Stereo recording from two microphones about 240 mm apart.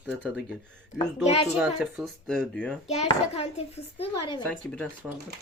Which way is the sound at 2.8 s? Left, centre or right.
Left.